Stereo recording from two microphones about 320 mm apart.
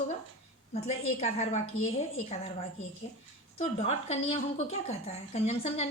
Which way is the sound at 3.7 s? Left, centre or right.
Centre.